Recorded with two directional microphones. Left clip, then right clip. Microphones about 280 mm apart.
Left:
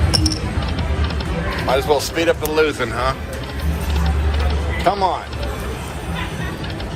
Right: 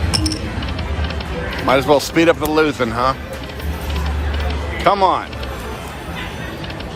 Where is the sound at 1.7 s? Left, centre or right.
Right.